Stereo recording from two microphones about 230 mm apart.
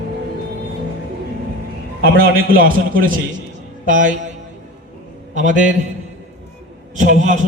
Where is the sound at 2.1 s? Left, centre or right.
Right.